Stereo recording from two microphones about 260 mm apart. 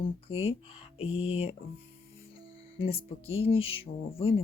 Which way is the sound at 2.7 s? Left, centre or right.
Left.